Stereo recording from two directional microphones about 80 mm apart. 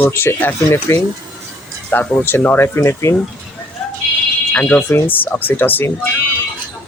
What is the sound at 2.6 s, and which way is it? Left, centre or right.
Speech, left.